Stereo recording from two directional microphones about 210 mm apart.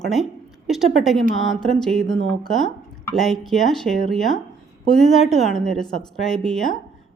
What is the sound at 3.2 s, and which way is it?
A woman's voice, centre (ahead or behind).